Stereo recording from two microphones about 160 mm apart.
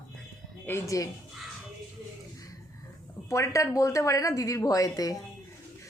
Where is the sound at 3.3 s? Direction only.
20° left (ahead or behind).